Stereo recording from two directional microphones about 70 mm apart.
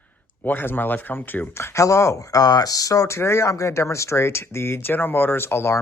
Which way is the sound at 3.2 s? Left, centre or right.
Left.